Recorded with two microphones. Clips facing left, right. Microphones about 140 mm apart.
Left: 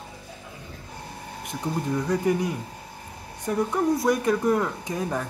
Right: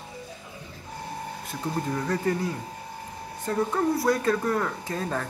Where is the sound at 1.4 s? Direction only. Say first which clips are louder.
Left 2 dB; 15° left (ahead or behind).